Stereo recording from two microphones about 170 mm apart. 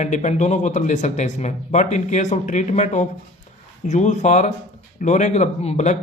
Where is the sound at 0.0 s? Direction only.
45° left (ahead or behind).